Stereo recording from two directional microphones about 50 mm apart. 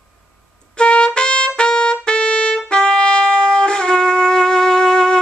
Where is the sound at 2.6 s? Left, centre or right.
Centre.